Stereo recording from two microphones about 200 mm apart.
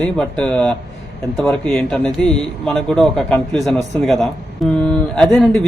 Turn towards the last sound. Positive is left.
turn(degrees=0)  # may be behind; listen again after turning